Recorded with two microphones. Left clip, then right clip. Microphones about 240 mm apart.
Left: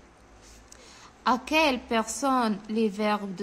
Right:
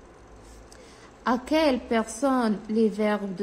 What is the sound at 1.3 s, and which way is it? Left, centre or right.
A woman's voice, centre.